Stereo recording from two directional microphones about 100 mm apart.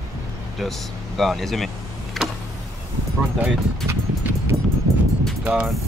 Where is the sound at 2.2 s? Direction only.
Centre (ahead or behind).